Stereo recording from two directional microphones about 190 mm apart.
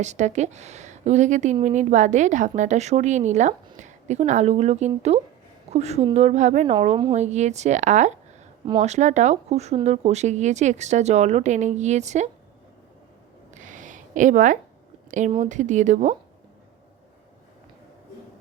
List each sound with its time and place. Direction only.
0.0 s a woman's voice: 40° right (ahead or behind)
13.5 s a sound: 40° right (ahead or behind)
15.3 s a woman's voice: 40° right (ahead or behind)